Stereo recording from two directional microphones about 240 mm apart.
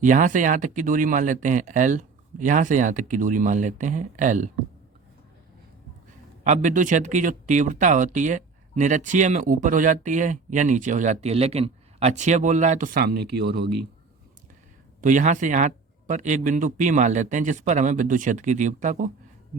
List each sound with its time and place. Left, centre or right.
0.0 s speech: right
6.4 s speech: right
15.0 s speech: right